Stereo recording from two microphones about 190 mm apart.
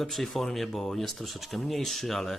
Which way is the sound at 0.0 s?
Centre (ahead or behind).